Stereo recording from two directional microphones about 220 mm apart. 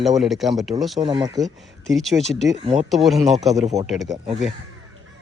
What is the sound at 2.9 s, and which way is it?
Speech, centre (ahead or behind).